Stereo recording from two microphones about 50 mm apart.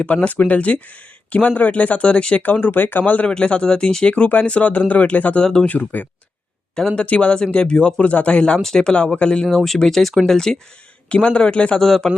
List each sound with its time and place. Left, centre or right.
0.0 s speech: left
3.2 s speech: left
4.1 s speech: left
5.4 s speech: centre
5.6 s speech: left
6.7 s speech: centre
9.6 s speech: centre
11.1 s speech: left
11.8 s speech: centre